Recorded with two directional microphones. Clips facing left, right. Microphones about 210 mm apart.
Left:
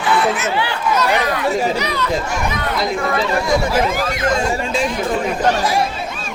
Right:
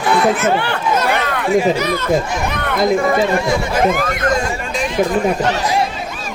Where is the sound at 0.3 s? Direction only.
55° right (ahead or behind).